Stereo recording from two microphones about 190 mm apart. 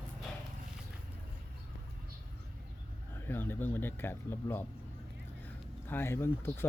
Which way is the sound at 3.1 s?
10° left (ahead or behind).